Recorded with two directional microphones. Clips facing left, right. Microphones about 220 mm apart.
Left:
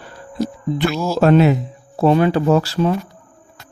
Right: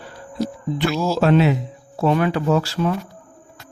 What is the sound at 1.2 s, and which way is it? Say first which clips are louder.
Speech: left 4 dB; 45° left (ahead or behind).